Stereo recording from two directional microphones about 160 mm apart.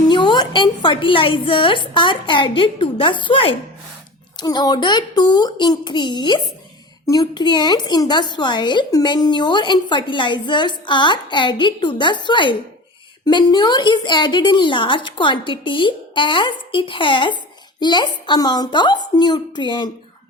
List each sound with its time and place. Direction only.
0.1 s a woman's voice: 30° left (ahead or behind)